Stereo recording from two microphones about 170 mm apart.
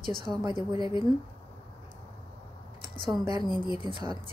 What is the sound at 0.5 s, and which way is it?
Speech, 30° left (ahead or behind).